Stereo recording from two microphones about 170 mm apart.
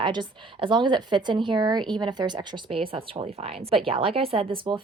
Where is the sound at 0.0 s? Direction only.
25° right (ahead or behind).